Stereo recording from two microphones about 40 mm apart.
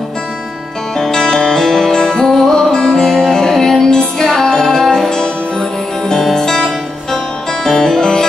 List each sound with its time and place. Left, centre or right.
0.9 s music: centre
5.1 s music: centre